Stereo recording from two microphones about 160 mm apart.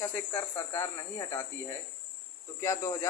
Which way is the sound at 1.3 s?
20° left (ahead or behind).